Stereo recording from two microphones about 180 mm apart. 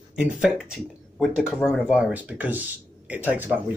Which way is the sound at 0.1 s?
5° right (ahead or behind).